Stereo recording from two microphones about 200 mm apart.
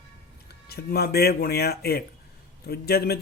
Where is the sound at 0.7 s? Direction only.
50° left (ahead or behind).